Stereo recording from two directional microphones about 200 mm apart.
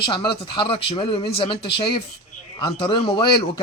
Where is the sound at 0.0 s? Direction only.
25° left (ahead or behind).